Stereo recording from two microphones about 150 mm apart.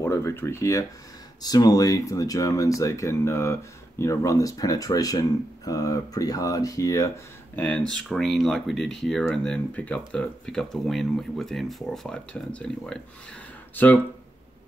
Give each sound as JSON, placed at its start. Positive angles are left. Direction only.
{"t": 0.0, "sound": "speech", "side_deg": 15}
{"t": 7.5, "sound": "speech", "side_deg": 10}